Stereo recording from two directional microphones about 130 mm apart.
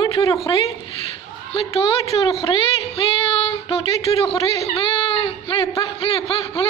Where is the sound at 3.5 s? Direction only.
45° left (ahead or behind).